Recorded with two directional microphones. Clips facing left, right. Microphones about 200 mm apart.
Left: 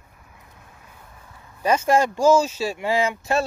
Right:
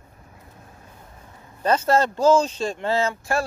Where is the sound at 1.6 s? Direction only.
10° left (ahead or behind).